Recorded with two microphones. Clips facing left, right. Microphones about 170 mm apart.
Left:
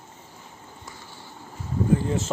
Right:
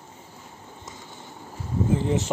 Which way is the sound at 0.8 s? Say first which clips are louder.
Right 2 dB; 20° right (ahead or behind).